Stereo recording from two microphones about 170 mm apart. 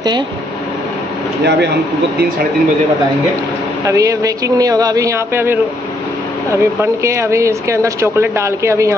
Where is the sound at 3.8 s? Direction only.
20° right (ahead or behind).